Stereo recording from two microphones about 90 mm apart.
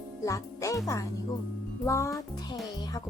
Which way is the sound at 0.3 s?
40° left (ahead or behind).